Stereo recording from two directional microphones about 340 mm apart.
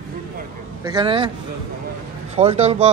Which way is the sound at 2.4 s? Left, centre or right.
Centre.